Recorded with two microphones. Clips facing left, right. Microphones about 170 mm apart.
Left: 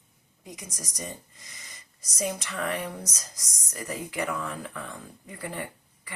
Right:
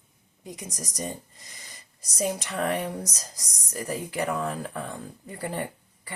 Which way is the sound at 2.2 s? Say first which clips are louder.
Right 3 dB; 40° right (ahead or behind).